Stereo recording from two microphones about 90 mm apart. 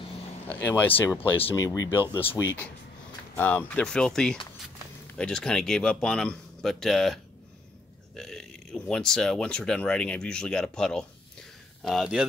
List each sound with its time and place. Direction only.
0.5 s speech: 20° left (ahead or behind)
1.6 s speech: 35° left (ahead or behind)
3.3 s speech: 20° left (ahead or behind); by 7.2 s 5° left (ahead or behind)
8.2 s speech: 5° left (ahead or behind)